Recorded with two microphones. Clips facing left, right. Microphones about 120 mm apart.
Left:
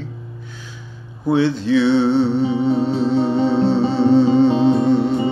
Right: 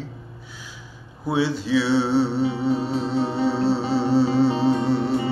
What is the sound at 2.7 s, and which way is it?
Music, 10° right (ahead or behind).